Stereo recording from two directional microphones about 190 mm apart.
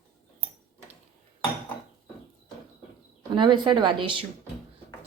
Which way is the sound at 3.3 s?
25° right (ahead or behind).